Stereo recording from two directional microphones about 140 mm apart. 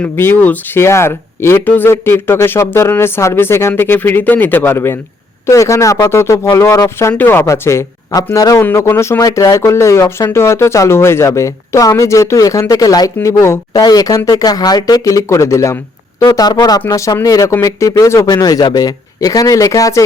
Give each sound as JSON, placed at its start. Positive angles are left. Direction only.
{"t": 0.0, "sound": "speech", "side_deg": 15}